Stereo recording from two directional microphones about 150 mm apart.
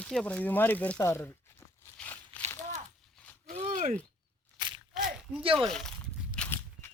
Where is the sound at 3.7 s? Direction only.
55° right (ahead or behind).